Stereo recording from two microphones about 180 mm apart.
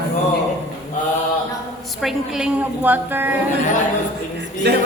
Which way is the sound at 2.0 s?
Centre (ahead or behind).